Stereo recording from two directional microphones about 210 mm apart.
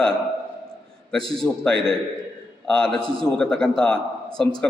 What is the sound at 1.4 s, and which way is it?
A man's voice, 5° left (ahead or behind).